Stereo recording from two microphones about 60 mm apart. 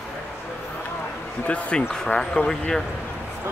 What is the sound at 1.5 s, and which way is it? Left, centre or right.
Speech, centre.